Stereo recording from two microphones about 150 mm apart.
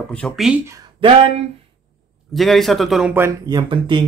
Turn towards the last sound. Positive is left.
turn(degrees=-30)  # may be behind; listen again after turning